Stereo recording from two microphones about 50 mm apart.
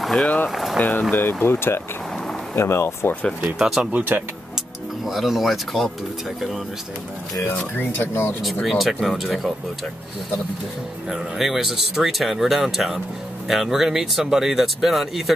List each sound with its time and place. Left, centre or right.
0.0 s boiling: centre
0.5 s a sound: centre
0.7 s speech: left
1.1 s speech: left
3.5 s speech: centre
4.1 s speech: right
5.0 s speech: centre
7.8 s speech: left
8.6 s speech: centre
11.1 s speech: centre